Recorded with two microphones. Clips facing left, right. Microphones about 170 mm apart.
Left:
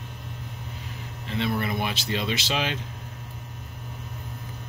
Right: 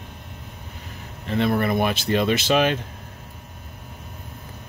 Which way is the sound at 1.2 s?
50° right (ahead or behind).